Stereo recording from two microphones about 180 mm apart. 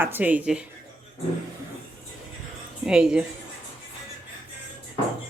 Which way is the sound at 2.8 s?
5° right (ahead or behind).